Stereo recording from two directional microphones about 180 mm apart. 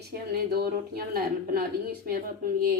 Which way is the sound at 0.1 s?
55° right (ahead or behind).